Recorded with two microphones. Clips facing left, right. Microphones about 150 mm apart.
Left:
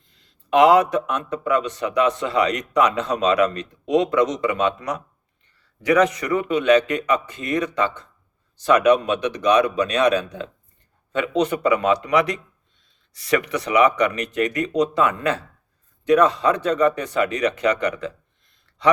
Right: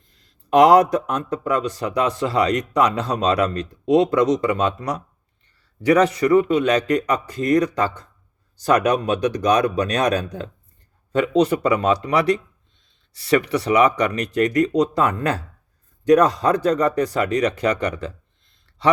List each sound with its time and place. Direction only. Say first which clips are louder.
0.5 s a man's voice: right 2 dB; 40° right (ahead or behind)